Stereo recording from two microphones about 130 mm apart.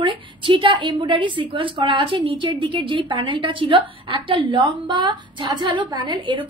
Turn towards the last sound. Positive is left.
turn(degrees=-40)  # may be behind; listen again after turning